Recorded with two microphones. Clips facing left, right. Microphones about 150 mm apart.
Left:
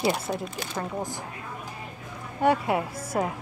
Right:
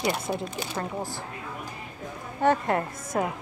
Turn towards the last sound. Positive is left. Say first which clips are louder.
# even
turn(degrees=5)  # may be behind; listen again after turning